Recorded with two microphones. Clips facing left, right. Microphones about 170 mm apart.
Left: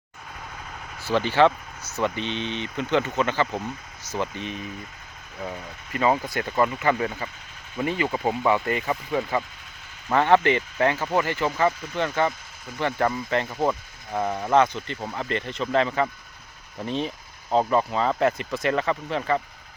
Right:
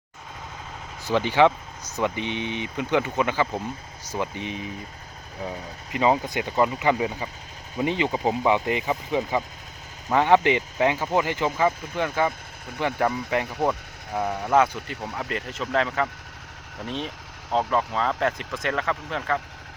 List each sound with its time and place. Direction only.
1.0 s speech: 15° right (ahead or behind)
5.9 s speech: 20° right (ahead or behind)
14.1 s speech: centre (ahead or behind)